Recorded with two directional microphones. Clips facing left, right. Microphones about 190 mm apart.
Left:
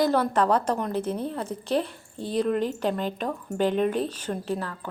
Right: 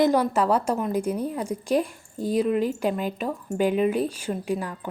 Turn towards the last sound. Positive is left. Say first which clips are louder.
# right 2 dB
turn(degrees=-15)  # may be behind; listen again after turning